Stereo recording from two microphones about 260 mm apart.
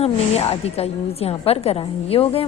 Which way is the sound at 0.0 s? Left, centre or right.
Left.